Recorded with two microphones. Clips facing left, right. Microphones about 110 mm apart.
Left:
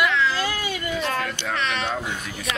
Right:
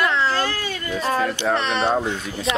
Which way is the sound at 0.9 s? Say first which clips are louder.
Right 6 dB; 35° right (ahead or behind).